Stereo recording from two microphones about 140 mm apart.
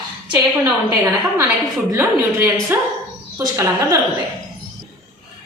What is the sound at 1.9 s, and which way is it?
Speech, 15° right (ahead or behind).